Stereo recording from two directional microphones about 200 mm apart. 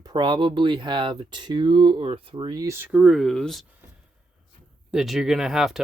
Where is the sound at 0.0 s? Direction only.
20° right (ahead or behind); by 3.7 s centre (ahead or behind).